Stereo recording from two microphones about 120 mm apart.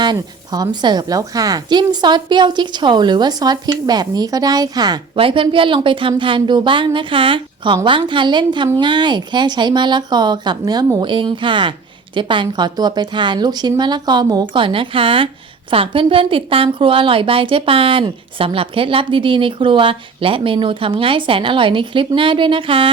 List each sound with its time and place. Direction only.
0.0 s a woman's voice: 35° right (ahead or behind)
5.1 s a woman's voice: 45° right (ahead or behind)
14.5 s a woman's voice: 45° right (ahead or behind)